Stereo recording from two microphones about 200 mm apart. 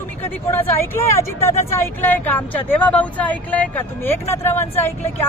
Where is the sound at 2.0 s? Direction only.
10° left (ahead or behind).